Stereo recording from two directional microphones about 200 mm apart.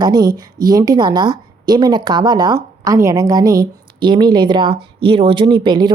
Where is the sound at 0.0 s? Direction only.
20° right (ahead or behind).